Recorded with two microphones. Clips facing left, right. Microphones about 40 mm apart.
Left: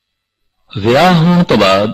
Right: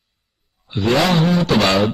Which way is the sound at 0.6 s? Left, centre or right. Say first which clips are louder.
Left 7 dB; left.